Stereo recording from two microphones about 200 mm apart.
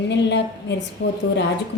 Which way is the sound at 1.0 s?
70° left (ahead or behind).